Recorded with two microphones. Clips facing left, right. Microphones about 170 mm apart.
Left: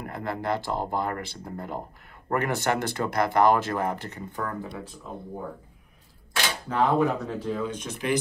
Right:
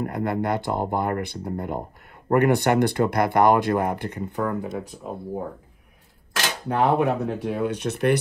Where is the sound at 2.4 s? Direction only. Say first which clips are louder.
Right 8 dB; 50° right (ahead or behind).